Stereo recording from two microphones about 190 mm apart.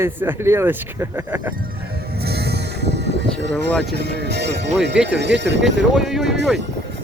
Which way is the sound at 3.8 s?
60° right (ahead or behind).